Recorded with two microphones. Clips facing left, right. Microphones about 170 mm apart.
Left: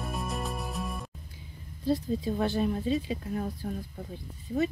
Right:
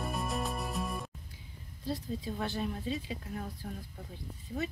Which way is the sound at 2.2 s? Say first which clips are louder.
Left 8 dB; 35° left (ahead or behind).